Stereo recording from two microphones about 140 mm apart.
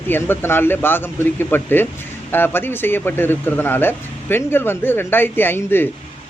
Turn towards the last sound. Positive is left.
turn(degrees=15)  # may be behind; listen again after turning